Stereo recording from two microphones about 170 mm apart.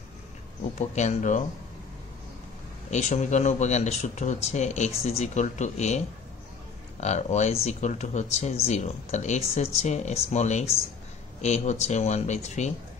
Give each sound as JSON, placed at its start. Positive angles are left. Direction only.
{"t": 0.7, "sound": "speech", "side_deg": 45}
{"t": 2.9, "sound": "speech", "side_deg": 40}